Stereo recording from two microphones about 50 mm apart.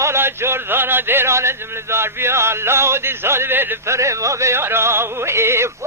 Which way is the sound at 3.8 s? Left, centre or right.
Right.